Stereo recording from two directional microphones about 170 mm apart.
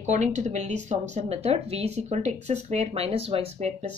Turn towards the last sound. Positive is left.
turn(degrees=-40)  # may be behind; listen again after turning